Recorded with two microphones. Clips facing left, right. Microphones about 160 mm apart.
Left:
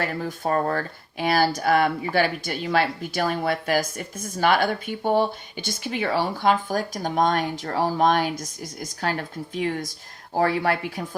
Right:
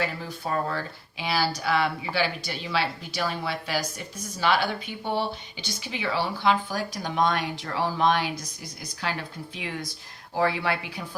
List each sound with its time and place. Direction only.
0.0 s speech: 50° left (ahead or behind)